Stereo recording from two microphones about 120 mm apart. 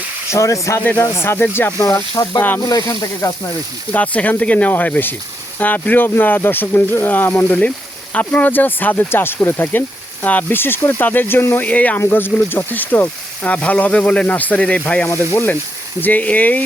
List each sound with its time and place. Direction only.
0.3 s speech: 25° left (ahead or behind)
3.9 s speech: 10° left (ahead or behind)
15.0 s speech: 25° left (ahead or behind)